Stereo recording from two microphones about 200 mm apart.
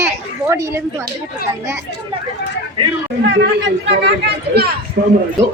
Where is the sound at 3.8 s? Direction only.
55° right (ahead or behind).